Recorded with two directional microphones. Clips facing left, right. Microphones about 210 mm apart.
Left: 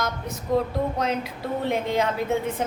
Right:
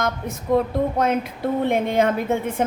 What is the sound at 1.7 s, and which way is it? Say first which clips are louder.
Speech: right 3 dB; 55° right (ahead or behind).